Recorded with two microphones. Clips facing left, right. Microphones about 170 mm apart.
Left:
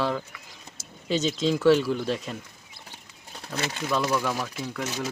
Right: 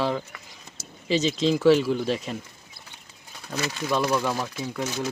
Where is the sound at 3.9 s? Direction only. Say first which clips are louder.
Right 2 dB; 20° right (ahead or behind).